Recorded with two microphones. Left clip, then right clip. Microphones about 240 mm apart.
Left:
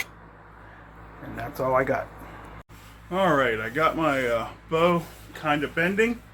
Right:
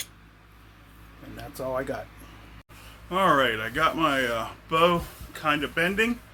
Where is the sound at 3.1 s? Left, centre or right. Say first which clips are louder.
Even; right.